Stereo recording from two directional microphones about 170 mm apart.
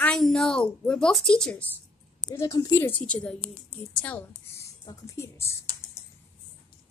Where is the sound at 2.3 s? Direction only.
20° left (ahead or behind).